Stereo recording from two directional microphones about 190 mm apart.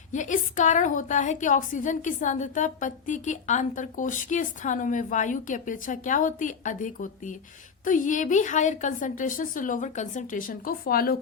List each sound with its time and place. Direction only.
0.1 s a woman's voice: 40° left (ahead or behind)